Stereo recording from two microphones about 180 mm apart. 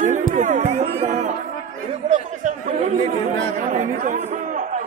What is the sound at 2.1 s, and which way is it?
Chatter, 40° right (ahead or behind).